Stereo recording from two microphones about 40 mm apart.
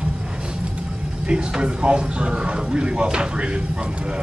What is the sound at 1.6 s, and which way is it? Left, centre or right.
Speech, right.